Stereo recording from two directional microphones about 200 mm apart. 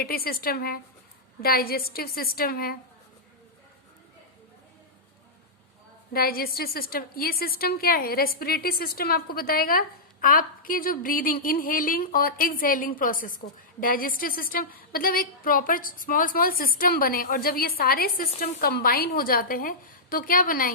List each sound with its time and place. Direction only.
0.0 s a woman's voice: 50° left (ahead or behind)
6.1 s a woman's voice: 50° left (ahead or behind)